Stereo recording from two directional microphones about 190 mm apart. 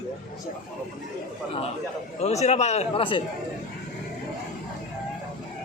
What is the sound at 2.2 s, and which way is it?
A man's voice, 35° left (ahead or behind).